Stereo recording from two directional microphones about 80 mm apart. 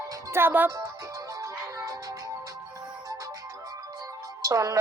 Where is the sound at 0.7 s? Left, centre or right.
Right.